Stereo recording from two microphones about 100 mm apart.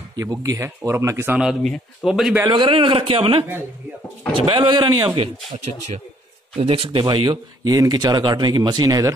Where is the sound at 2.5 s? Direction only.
55° right (ahead or behind).